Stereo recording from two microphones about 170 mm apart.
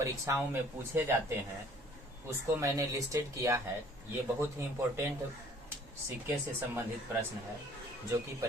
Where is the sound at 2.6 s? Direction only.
20° right (ahead or behind).